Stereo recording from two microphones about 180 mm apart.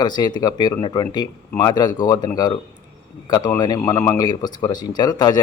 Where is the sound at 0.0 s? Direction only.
25° left (ahead or behind).